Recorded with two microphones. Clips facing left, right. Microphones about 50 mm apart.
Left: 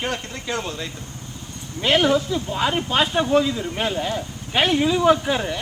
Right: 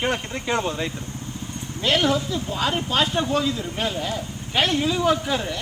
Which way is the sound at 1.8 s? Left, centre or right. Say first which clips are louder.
Left 3 dB; centre.